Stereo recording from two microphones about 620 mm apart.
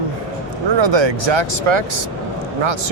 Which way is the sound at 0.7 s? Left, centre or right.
Right.